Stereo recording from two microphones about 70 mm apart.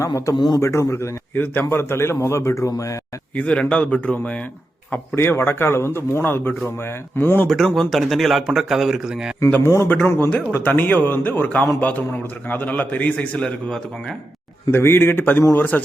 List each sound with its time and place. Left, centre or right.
0.0 s speech: left
1.4 s a man's voice: left
3.3 s speech: centre
5.1 s a man's voice: left
7.4 s a man's voice: centre
9.6 s a man's voice: left
10.2 s a man's voice: centre
13.4 s speech: centre
14.7 s a man's voice: left